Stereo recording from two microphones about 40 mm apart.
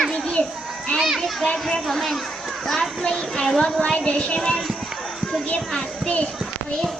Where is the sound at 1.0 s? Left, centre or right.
Centre.